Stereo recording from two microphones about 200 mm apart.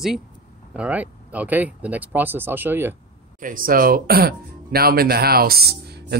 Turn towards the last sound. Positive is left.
turn(degrees=-50)  # may be behind; listen again after turning